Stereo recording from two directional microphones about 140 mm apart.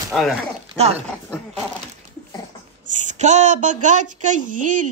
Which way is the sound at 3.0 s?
55° right (ahead or behind).